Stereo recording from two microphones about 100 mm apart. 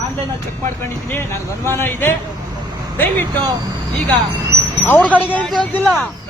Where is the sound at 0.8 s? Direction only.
25° left (ahead or behind).